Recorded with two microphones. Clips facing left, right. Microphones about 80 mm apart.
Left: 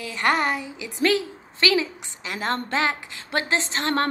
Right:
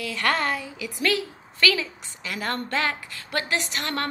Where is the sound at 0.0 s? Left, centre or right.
Left.